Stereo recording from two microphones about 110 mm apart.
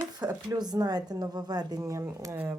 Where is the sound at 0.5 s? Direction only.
35° right (ahead or behind).